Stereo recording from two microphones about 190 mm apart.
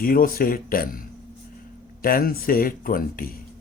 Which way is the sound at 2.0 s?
50° left (ahead or behind).